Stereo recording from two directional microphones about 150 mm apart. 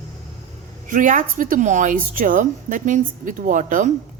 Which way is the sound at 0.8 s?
60° right (ahead or behind).